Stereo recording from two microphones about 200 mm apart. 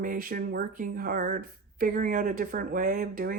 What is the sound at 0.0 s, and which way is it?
Speech, 45° right (ahead or behind).